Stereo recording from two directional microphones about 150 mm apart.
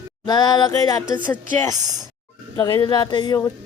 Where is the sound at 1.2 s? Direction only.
10° left (ahead or behind).